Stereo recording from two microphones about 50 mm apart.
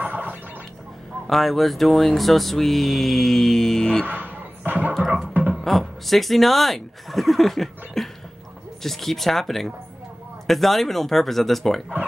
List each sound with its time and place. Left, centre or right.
0.0 s gargling: right
1.2 s mantra: centre
4.0 s a sound: right
5.6 s speech: centre
8.8 s mantra: centre